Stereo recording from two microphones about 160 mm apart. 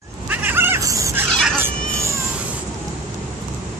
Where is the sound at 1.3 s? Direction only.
5° left (ahead or behind).